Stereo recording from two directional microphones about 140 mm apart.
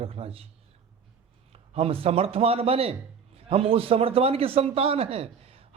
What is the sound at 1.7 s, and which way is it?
Speech, 45° right (ahead or behind).